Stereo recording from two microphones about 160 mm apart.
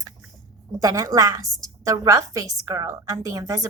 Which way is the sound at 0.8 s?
20° right (ahead or behind).